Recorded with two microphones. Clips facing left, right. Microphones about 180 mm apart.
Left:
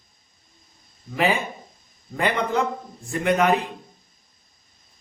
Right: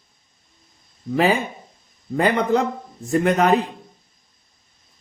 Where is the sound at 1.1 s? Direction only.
40° right (ahead or behind).